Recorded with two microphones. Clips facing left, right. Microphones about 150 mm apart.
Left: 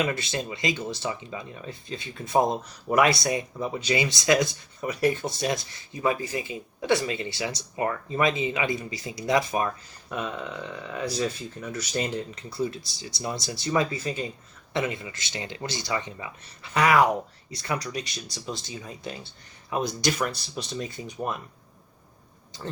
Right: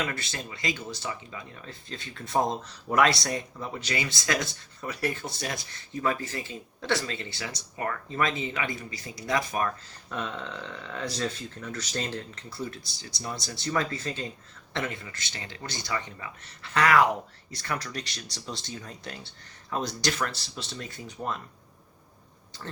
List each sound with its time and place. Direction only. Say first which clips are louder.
0.0 s speech: left 6 dB; 20° left (ahead or behind)